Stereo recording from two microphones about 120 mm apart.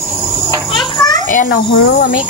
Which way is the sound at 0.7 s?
35° left (ahead or behind).